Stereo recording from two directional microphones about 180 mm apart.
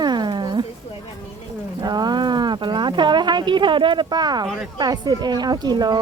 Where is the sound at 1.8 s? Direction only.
25° right (ahead or behind).